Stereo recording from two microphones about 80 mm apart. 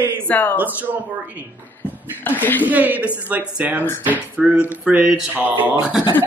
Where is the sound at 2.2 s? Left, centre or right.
Left.